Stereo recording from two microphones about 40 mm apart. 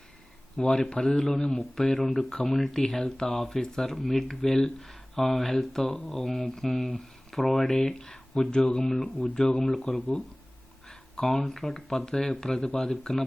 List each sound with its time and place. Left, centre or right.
0.5 s speech: left
1.5 s speech: centre